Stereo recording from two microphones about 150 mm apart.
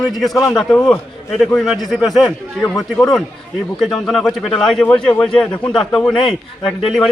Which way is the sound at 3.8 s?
Centre (ahead or behind).